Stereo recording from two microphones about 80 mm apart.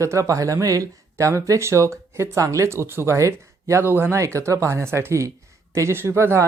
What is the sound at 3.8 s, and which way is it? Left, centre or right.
Speech, right.